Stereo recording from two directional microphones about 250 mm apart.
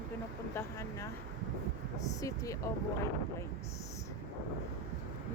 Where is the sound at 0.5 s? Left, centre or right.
Centre.